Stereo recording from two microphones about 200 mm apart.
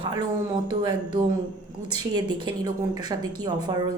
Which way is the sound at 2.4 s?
20° right (ahead or behind).